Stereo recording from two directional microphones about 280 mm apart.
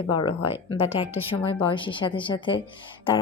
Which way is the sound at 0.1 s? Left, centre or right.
Centre.